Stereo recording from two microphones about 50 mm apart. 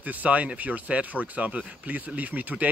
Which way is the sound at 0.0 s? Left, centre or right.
Right.